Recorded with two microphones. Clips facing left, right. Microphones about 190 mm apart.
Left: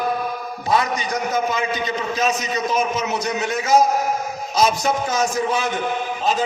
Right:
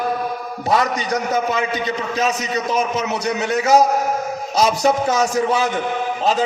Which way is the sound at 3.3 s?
35° right (ahead or behind).